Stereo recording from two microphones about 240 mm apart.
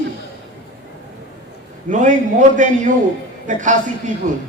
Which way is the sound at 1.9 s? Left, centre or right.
Right.